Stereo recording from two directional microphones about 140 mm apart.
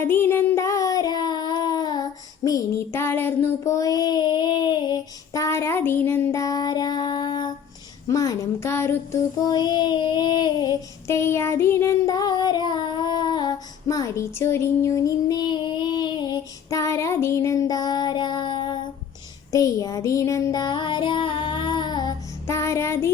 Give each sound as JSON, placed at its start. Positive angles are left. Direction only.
{"t": 0.0, "sound": "child singing", "side_deg": 15}
{"t": 8.0, "sound": "a woman's voice", "side_deg": 25}
{"t": 9.5, "sound": "child singing", "side_deg": 30}
{"t": 11.1, "sound": "child singing", "side_deg": 20}
{"t": 19.5, "sound": "a sound", "side_deg": 25}